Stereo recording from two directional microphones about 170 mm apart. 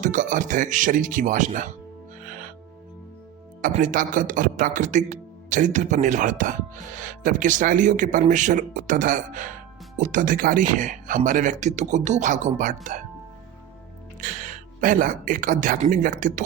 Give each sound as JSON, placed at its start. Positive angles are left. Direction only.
{"t": 0.0, "sound": "a man's voice", "side_deg": -50}
{"t": 2.2, "sound": "music", "side_deg": -55}
{"t": 3.6, "sound": "a man's voice", "side_deg": -50}
{"t": 14.2, "sound": "speech", "side_deg": -50}